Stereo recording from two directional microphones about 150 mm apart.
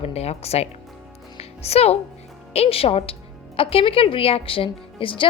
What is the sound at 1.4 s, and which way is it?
Music, 45° left (ahead or behind).